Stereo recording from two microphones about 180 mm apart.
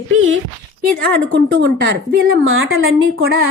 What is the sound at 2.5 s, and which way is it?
Speech, 90° right.